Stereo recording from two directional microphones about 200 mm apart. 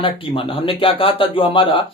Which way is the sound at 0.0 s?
25° left (ahead or behind).